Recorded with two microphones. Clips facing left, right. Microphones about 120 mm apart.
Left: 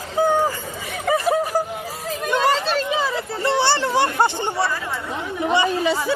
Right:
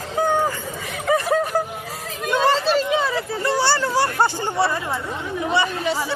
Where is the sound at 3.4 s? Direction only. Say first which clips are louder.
Left 2 dB; 25° left (ahead or behind).